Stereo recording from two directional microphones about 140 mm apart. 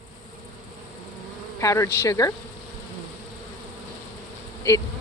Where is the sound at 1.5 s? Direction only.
20° left (ahead or behind).